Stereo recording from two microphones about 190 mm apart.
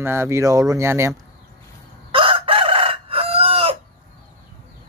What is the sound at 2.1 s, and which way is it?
Chicken, 30° right (ahead or behind).